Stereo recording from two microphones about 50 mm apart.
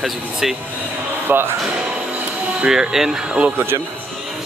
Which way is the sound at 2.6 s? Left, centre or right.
Centre.